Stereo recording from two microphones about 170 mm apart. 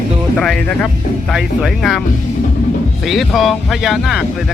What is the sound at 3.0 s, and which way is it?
Speech, centre (ahead or behind).